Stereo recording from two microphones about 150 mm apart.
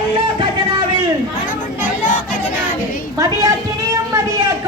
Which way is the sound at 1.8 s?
60° left (ahead or behind).